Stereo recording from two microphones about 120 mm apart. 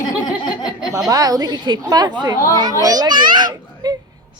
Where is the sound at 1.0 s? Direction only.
30° right (ahead or behind).